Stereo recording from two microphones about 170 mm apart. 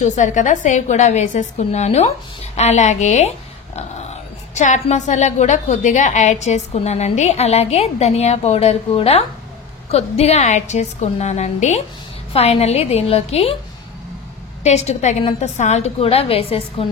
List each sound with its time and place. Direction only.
0.0 s a woman's voice: 45° left (ahead or behind)
14.6 s speech: 40° left (ahead or behind)